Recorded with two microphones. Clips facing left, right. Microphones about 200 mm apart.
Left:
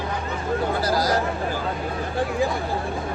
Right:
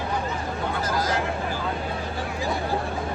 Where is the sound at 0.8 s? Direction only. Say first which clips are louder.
Left 2 dB; 35° left (ahead or behind).